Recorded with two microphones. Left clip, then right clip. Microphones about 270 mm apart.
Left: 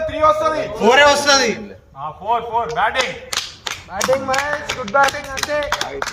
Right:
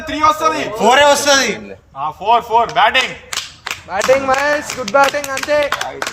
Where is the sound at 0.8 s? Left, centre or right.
Centre.